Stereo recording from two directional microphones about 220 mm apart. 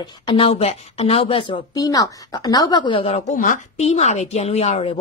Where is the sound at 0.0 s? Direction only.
20° left (ahead or behind).